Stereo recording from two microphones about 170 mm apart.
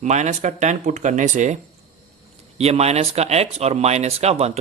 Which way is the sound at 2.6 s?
40° right (ahead or behind).